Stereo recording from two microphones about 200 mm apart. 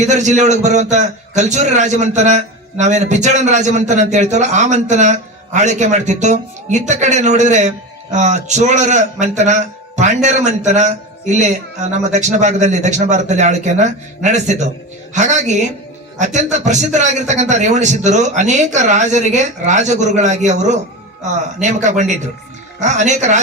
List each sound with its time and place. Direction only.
0.0 s a man's voice: 35° right (ahead or behind)